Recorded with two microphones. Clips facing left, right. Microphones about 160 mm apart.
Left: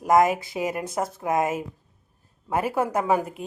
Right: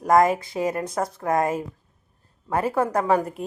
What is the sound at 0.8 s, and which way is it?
Speech, 25° left (ahead or behind).